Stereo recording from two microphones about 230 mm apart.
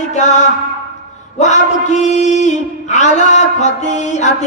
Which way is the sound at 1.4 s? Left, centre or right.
Left.